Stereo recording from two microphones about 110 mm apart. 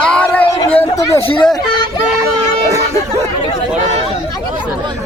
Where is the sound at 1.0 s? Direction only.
25° left (ahead or behind).